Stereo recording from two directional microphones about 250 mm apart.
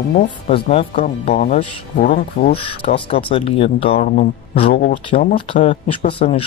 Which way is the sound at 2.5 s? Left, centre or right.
Left.